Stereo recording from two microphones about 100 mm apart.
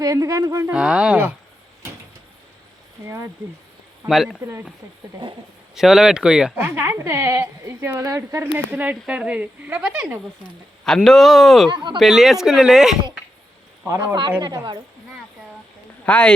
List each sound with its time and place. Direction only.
0.0 s speech: 35° right (ahead or behind)
0.7 s speech: 10° right (ahead or behind)
4.1 s speech: 5° right (ahead or behind)
5.7 s speech: 5° right (ahead or behind)
6.7 s a woman's voice: 25° right (ahead or behind)
8.5 s speech: 15° right (ahead or behind)
10.8 s speech: 5° left (ahead or behind)
11.7 s a woman's voice: 50° right (ahead or behind)
11.9 s speech: centre (ahead or behind)
14.4 s a woman's voice: 45° right (ahead or behind)
16.0 s speech: 15° left (ahead or behind)